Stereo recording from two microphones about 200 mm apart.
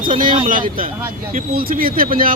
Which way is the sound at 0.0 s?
45° right (ahead or behind).